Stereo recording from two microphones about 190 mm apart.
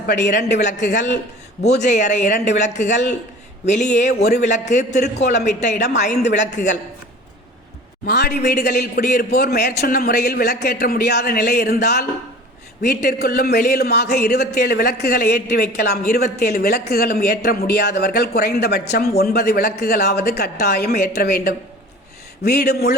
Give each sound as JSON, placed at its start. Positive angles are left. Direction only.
{"t": 0.3, "sound": "a man's voice", "side_deg": 40}
{"t": 8.0, "sound": "a man's voice", "side_deg": 60}
{"t": 14.5, "sound": "a man's voice", "side_deg": 50}